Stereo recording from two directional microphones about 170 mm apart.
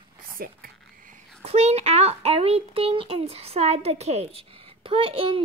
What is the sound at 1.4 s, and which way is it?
A child's voice, 40° right (ahead or behind).